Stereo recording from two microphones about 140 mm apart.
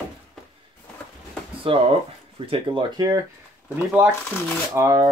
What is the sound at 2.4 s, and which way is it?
Speech, 40° right (ahead or behind).